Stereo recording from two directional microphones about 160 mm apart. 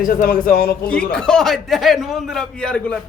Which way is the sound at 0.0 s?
65° left (ahead or behind).